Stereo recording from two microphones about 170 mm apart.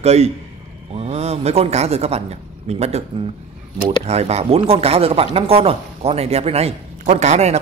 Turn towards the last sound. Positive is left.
turn(degrees=-40)  # may be behind; listen again after turning